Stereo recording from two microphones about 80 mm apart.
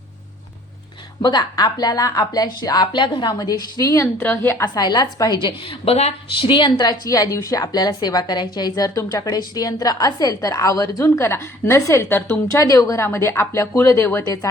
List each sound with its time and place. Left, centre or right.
1.2 s speech: left
3.3 s a woman's voice: left
4.2 s a woman's voice: left
4.6 s a woman's voice: left
11.0 s speech: left
12.0 s a woman's voice: left
12.5 s speech: left